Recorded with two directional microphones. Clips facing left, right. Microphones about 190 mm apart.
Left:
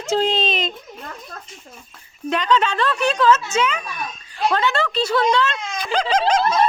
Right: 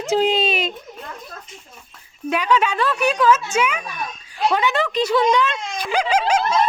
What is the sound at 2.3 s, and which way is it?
Speech, 10° right (ahead or behind).